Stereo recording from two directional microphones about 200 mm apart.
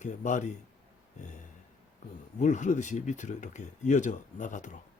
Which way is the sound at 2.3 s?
35° left (ahead or behind).